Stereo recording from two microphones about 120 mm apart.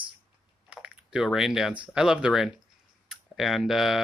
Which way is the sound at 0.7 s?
10° right (ahead or behind).